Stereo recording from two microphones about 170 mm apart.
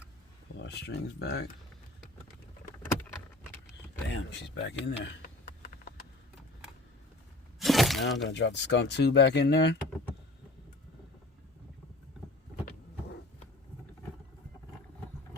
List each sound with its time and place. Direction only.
0.6 s speech: 80° left
4.1 s speech: 90° left
7.6 s a sound: centre (ahead or behind)
8.0 s speech: 90° left